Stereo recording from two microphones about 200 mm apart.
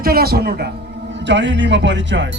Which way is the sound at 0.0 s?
50° right (ahead or behind).